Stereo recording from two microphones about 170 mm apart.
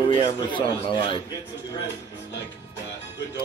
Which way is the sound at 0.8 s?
30° left (ahead or behind).